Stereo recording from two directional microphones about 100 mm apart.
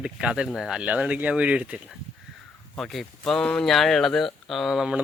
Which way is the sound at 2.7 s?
Centre (ahead or behind).